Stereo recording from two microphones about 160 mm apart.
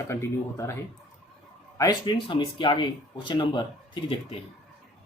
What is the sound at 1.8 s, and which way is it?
Speech, 25° left (ahead or behind).